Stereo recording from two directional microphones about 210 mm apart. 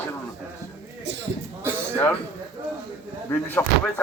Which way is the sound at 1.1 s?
55° right (ahead or behind).